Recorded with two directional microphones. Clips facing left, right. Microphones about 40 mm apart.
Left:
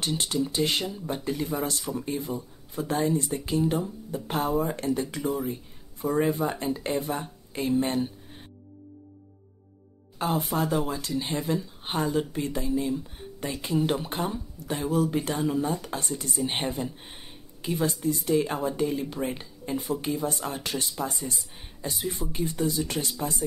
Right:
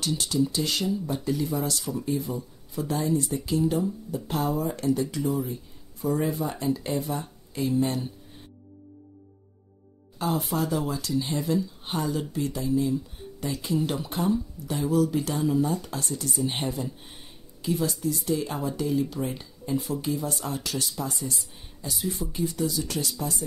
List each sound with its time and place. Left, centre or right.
0.0 s speech: left
10.1 s speech: left